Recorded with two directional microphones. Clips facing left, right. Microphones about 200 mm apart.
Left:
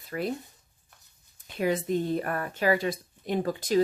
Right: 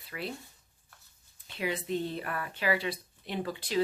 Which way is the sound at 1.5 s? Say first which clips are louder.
Left 6 dB; 45° left (ahead or behind).